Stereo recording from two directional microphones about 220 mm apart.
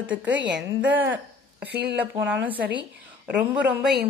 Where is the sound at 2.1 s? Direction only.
10° right (ahead or behind).